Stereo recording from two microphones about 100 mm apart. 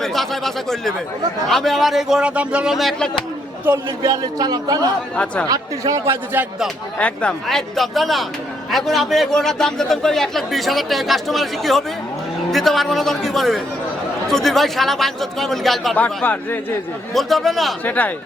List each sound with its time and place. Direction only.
0.0 s a man's voice: 5° left (ahead or behind)
4.0 s speech: 40° right (ahead or behind)
5.1 s a man's voice: 10° left (ahead or behind)
5.5 s speech: 35° right (ahead or behind)
6.3 s a man's voice: 20° right (ahead or behind)
7.0 s a man's voice: 10° left (ahead or behind)
7.4 s a man's voice: centre (ahead or behind)
16.0 s a man's voice: 15° left (ahead or behind)
17.2 s a man's voice: centre (ahead or behind)
17.8 s a man's voice: 15° left (ahead or behind)